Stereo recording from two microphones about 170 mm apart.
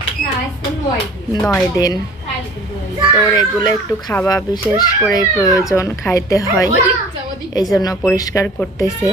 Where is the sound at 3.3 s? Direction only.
25° left (ahead or behind).